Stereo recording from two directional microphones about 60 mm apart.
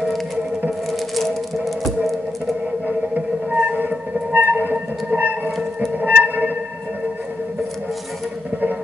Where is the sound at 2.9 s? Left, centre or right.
Right.